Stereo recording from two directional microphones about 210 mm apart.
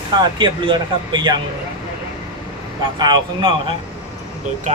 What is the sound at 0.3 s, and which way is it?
A man's voice, 20° right (ahead or behind).